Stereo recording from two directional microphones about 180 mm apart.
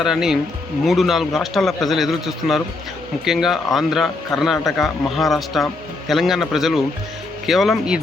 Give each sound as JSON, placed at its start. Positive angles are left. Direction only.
{"t": 0.0, "sound": "a man's voice", "side_deg": 0}